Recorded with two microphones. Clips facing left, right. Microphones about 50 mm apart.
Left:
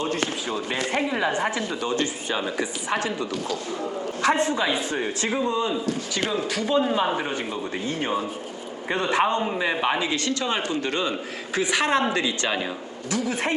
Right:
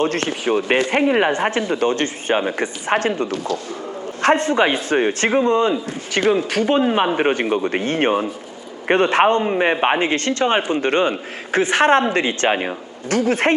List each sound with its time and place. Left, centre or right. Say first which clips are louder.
0.0 s speech: right 6 dB; right